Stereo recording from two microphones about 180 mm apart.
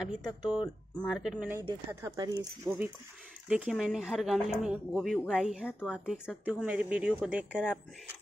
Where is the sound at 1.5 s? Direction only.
15° right (ahead or behind).